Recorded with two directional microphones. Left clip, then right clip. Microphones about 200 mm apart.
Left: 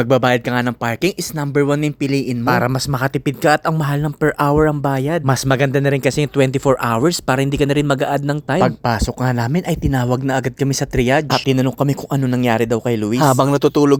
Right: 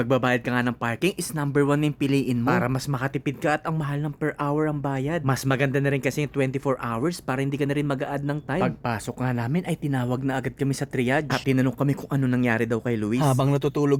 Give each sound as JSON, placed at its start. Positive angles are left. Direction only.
{"t": 0.0, "sound": "speech", "side_deg": 30}
{"t": 2.4, "sound": "speech", "side_deg": 30}